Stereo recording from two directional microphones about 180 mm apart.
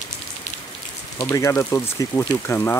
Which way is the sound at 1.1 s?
20° left (ahead or behind).